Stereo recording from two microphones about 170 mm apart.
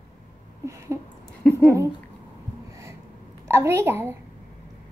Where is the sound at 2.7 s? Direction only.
15° right (ahead or behind).